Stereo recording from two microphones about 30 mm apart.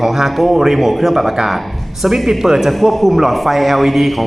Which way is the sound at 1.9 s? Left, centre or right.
Centre.